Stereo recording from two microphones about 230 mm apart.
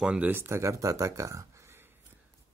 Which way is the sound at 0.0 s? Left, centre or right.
Centre.